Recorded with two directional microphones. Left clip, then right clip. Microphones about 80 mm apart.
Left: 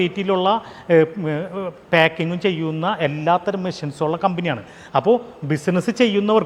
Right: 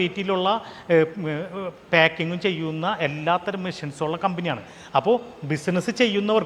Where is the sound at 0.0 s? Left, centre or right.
Left.